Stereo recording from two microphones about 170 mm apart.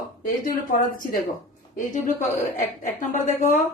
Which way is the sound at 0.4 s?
50° left (ahead or behind).